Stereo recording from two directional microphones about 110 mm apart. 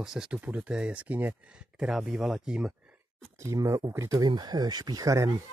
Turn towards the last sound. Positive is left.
turn(degrees=-30)  # may be behind; listen again after turning